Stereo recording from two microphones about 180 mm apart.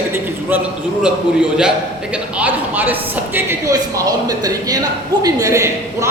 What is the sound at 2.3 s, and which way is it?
Speech, 10° right (ahead or behind).